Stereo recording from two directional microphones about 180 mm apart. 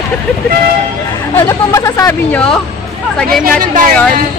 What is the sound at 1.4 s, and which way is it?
Speech, 15° left (ahead or behind).